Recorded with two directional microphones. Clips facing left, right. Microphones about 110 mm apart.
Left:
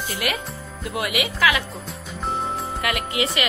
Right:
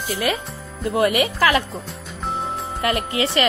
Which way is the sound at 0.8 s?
35° right (ahead or behind).